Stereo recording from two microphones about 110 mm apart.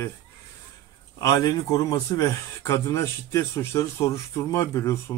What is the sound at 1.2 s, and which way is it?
Speech, 35° left (ahead or behind).